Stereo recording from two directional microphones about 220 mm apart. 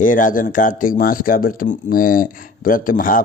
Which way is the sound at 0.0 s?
35° left (ahead or behind).